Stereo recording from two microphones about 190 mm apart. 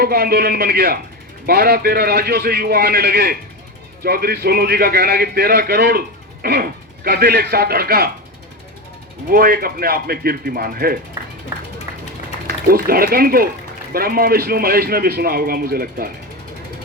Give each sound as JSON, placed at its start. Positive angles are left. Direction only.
{"t": 0.0, "sound": "a man's voice", "side_deg": -55}
{"t": 9.3, "sound": "a man's voice", "side_deg": -50}
{"t": 12.5, "sound": "a man's voice", "side_deg": -50}